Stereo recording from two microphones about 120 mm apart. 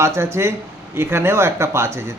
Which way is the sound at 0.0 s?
20° right (ahead or behind).